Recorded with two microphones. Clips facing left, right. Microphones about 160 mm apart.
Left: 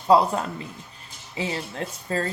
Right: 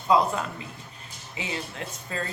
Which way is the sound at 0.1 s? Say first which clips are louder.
Left 4 dB; 35° left (ahead or behind).